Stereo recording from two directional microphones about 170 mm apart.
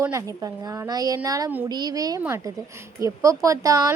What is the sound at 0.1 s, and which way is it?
Speech, 20° right (ahead or behind).